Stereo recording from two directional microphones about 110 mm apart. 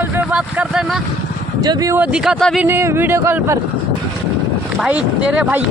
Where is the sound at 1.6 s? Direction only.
35° right (ahead or behind).